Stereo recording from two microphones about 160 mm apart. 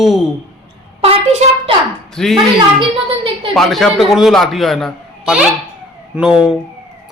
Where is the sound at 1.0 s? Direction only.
40° right (ahead or behind).